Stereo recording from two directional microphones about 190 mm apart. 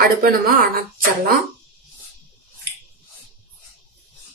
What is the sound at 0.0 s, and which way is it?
Speech, 50° right (ahead or behind).